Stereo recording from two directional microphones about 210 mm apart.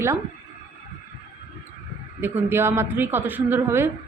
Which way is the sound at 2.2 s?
10° right (ahead or behind).